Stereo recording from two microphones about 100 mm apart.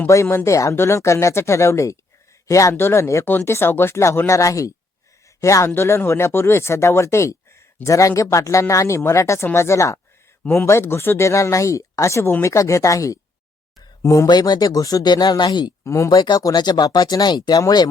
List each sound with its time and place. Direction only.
0.1 s speech: 30° left (ahead or behind)
10.4 s speech: 20° left (ahead or behind)
14.3 s speech: 45° left (ahead or behind)
15.8 s speech: 30° left (ahead or behind)
16.0 s speech: 40° left (ahead or behind)